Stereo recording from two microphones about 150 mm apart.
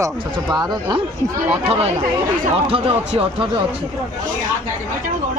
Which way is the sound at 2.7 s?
40° right (ahead or behind).